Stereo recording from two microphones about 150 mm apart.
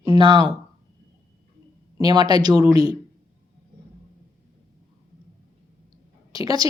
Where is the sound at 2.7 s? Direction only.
40° left (ahead or behind).